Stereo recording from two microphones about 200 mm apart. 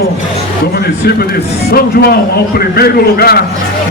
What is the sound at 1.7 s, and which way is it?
A man's voice, 50° left (ahead or behind).